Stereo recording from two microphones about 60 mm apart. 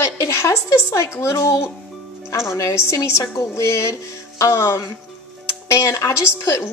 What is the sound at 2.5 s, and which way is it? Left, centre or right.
Speech, left.